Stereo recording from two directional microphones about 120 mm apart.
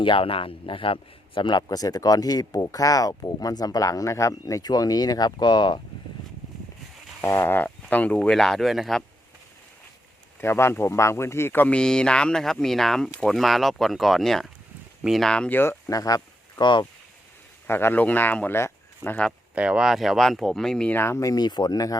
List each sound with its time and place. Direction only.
0.0 s speech: 45° left (ahead or behind)
7.2 s speech: 20° left (ahead or behind); by 9.0 s centre (ahead or behind)
10.4 s speech: 20° left (ahead or behind)
15.9 s speech: 30° left (ahead or behind)
17.7 s speech: 20° left (ahead or behind)
19.5 s speech: 10° right (ahead or behind)
20.9 s speech: 20° left (ahead or behind)